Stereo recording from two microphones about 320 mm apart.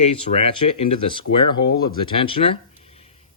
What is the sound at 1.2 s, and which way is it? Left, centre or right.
Speech, left.